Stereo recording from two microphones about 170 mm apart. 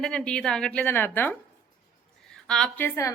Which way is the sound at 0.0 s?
5° left (ahead or behind).